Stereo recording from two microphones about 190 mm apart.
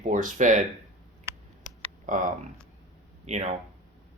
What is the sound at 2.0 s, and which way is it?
Speech, 45° right (ahead or behind).